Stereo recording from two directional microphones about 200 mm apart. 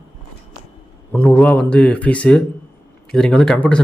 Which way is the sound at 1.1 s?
10° left (ahead or behind).